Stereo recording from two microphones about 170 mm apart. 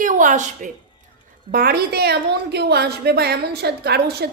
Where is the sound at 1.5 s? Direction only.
65° right (ahead or behind).